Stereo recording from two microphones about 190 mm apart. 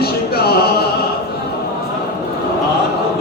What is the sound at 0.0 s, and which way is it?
Opera, 55° left (ahead or behind).